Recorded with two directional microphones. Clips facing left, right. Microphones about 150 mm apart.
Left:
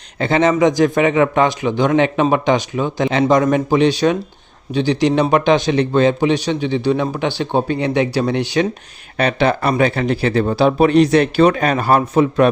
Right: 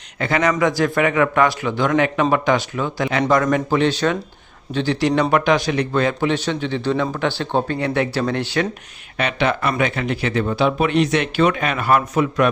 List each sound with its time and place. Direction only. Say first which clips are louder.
0.2 s a man's voice: left 4 dB; 25° left (ahead or behind)
9.1 s speech: left 4 dB; 35° left (ahead or behind)